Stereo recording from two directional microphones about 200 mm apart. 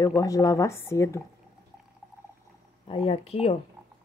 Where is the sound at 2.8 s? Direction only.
30° left (ahead or behind).